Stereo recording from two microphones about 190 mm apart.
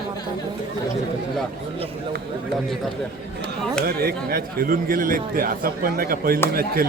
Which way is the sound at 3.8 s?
50° right (ahead or behind).